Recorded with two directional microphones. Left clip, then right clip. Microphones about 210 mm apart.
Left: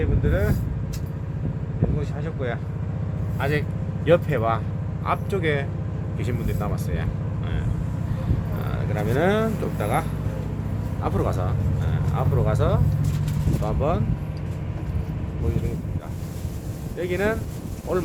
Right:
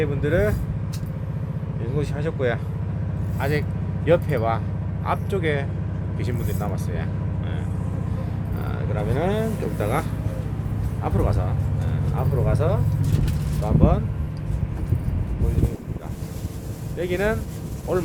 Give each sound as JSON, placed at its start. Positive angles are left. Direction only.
{"t": 0.0, "sound": "speech", "side_deg": -55}
{"t": 2.0, "sound": "speech", "side_deg": -50}
{"t": 3.4, "sound": "speech", "side_deg": 0}
{"t": 9.0, "sound": "speech", "side_deg": 15}
{"t": 9.7, "sound": "speech", "side_deg": 0}
{"t": 17.0, "sound": "speech", "side_deg": -15}